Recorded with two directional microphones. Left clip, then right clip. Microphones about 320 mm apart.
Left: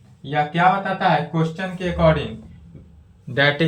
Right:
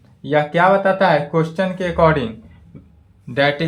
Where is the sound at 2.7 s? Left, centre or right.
Centre.